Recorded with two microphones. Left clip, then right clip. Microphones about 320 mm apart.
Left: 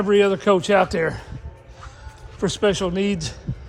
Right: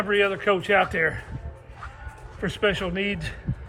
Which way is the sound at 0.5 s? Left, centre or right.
Left.